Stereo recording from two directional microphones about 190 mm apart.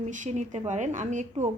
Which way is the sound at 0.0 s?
40° right (ahead or behind).